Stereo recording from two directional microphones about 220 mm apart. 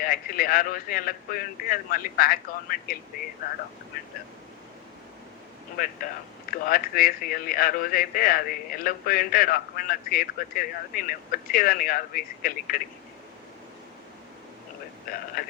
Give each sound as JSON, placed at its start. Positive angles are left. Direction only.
{"t": 0.0, "sound": "speech", "side_deg": 40}
{"t": 5.7, "sound": "speech", "side_deg": 40}
{"t": 15.4, "sound": "speech", "side_deg": 40}